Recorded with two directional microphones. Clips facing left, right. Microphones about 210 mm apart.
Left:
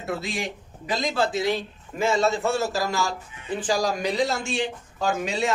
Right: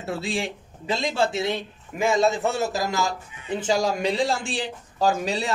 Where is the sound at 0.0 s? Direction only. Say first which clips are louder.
Right 1 dB; 30° right (ahead or behind).